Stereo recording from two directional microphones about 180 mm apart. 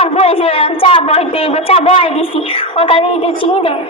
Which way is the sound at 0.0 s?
35° left (ahead or behind).